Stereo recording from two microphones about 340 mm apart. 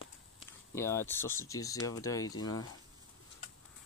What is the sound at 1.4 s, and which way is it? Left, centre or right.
Speech, centre.